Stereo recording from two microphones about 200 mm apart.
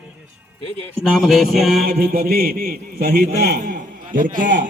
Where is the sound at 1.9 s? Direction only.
50° right (ahead or behind).